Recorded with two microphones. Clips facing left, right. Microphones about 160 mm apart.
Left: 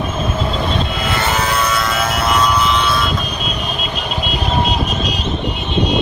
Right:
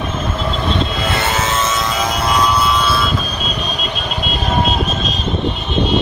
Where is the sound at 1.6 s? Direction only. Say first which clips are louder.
Even; 15° right (ahead or behind).